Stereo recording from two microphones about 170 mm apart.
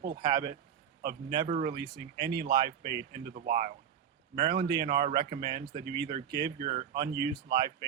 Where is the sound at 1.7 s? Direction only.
65° right (ahead or behind); by 3.7 s 45° right (ahead or behind).